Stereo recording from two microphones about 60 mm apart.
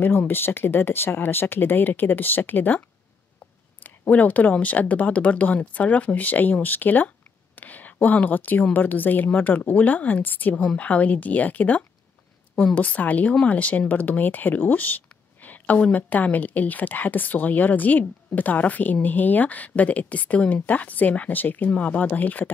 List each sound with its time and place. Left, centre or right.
0.3 s speech: left
3.8 s speech: left